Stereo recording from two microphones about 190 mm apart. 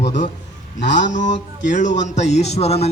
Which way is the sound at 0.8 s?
40° left (ahead or behind).